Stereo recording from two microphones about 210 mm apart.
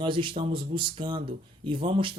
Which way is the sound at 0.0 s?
25° right (ahead or behind).